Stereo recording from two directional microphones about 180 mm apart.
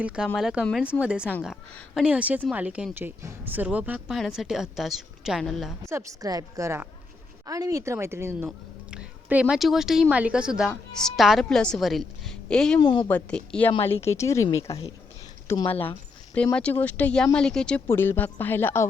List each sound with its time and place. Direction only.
0.3 s speech: centre (ahead or behind)
5.9 s speech: 15° right (ahead or behind); by 12.8 s 5° left (ahead or behind)
12.8 s speech: 25° left (ahead or behind)
13.1 s speech: 5° left (ahead or behind)
14.7 s speech: 30° left (ahead or behind)
15.8 s speech: 10° left (ahead or behind)